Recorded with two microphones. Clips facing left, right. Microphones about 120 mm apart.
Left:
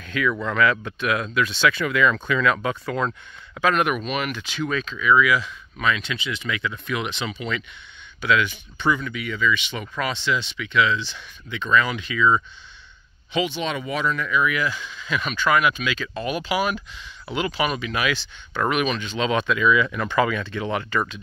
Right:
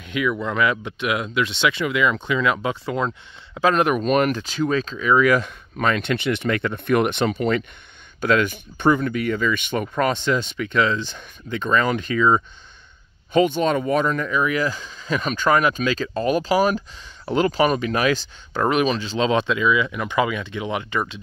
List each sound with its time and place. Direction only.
0.0 s speech: 20° right (ahead or behind)